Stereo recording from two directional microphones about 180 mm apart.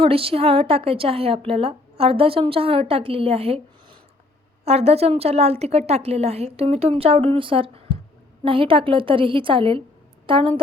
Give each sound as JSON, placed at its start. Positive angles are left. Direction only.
{"t": 0.0, "sound": "a woman's voice", "side_deg": -30}